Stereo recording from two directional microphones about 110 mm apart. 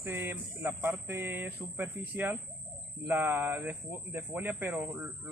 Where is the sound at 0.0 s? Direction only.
20° right (ahead or behind).